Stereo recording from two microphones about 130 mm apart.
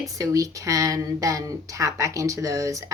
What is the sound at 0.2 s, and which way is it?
Speech, 25° right (ahead or behind).